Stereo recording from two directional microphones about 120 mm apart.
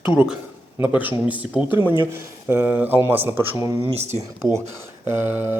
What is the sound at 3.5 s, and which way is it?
Speech, 45° left (ahead or behind).